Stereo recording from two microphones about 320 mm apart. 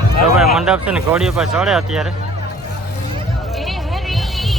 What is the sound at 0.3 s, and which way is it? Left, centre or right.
Speech, centre.